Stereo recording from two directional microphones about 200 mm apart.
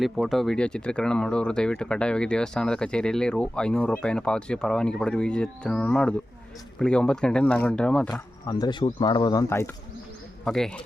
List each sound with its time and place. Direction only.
0.0 s speech: centre (ahead or behind)
8.1 s speech: 20° left (ahead or behind)
10.4 s speech: 5° left (ahead or behind)